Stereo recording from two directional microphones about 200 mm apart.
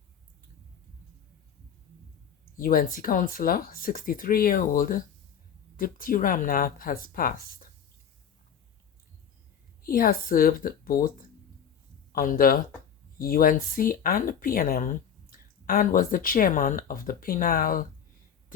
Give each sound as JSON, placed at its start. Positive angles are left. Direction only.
{"t": 2.6, "sound": "speech", "side_deg": 45}
{"t": 9.8, "sound": "speech", "side_deg": 45}
{"t": 12.1, "sound": "speech", "side_deg": 45}